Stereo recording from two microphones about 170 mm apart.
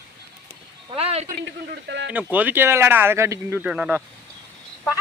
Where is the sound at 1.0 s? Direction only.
35° right (ahead or behind).